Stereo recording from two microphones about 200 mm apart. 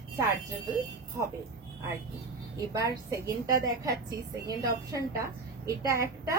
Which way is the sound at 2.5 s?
15° right (ahead or behind).